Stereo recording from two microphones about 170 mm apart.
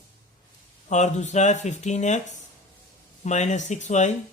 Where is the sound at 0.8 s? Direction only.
45° left (ahead or behind).